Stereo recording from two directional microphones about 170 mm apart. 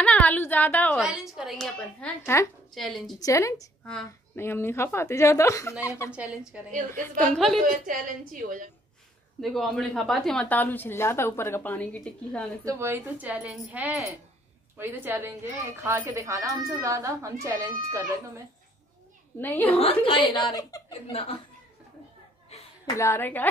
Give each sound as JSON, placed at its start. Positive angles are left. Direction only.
{"t": 0.0, "sound": "a sound", "side_deg": 10}
{"t": 0.9, "sound": "a woman's voice", "side_deg": -5}
{"t": 2.2, "sound": "a woman's voice", "side_deg": 15}
{"t": 2.7, "sound": "a woman's voice", "side_deg": 0}
{"t": 3.2, "sound": "a woman's voice", "side_deg": 20}
{"t": 6.1, "sound": "a woman's voice", "side_deg": -5}
{"t": 7.6, "sound": "a woman's voice", "side_deg": -50}
{"t": 9.4, "sound": "a woman's voice", "side_deg": 0}
{"t": 12.6, "sound": "a woman's voice", "side_deg": -15}
{"t": 19.3, "sound": "a woman's voice", "side_deg": 10}
{"t": 19.8, "sound": "speech", "side_deg": 30}
{"t": 21.1, "sound": "a woman's voice", "side_deg": 35}
{"t": 22.5, "sound": "a sound", "side_deg": 40}
{"t": 22.9, "sound": "a woman's voice", "side_deg": 15}